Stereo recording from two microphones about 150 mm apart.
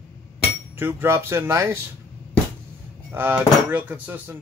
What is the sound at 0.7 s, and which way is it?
Speech, 15° right (ahead or behind).